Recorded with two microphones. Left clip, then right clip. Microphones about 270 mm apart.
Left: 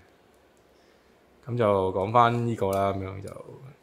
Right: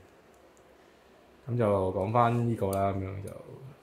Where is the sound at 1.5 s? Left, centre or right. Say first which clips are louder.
Left 4 dB; left.